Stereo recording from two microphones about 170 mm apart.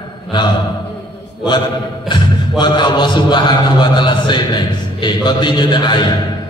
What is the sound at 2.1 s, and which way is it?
A man's voice, 25° left (ahead or behind).